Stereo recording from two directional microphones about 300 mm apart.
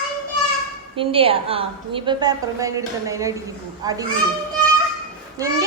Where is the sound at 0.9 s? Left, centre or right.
Centre.